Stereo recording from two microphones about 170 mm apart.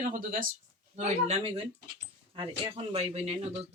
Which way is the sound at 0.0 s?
50° right (ahead or behind).